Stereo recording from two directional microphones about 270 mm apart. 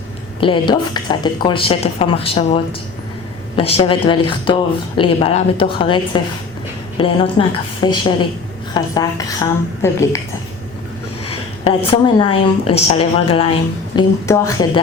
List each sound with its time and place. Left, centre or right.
0.3 s a woman's voice: centre
11.3 s a woman's voice: left